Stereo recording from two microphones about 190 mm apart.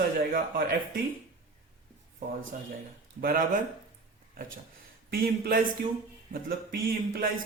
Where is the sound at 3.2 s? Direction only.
50° right (ahead or behind).